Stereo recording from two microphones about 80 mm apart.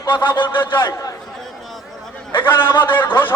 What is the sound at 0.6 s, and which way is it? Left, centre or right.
Speech, left.